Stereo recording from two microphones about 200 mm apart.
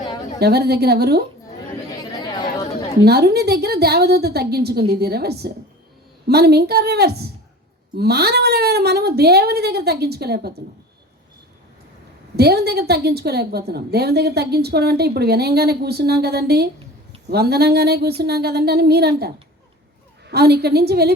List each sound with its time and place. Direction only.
0.3 s a woman's voice: 55° right (ahead or behind)
3.0 s a woman's voice: 50° right (ahead or behind)
12.4 s a woman's voice: 55° right (ahead or behind)